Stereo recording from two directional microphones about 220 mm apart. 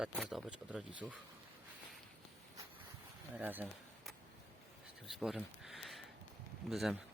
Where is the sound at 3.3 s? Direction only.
10° right (ahead or behind).